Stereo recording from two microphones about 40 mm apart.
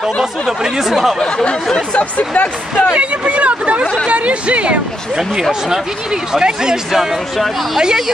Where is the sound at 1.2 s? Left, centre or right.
Left.